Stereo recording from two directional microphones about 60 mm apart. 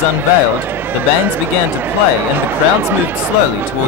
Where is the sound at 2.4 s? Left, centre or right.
Right.